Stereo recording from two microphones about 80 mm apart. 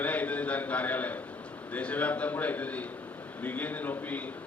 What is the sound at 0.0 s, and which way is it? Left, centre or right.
A man's voice, centre.